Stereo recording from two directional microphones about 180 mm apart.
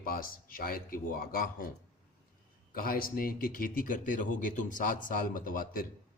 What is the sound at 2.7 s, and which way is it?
A man's voice, 55° left (ahead or behind).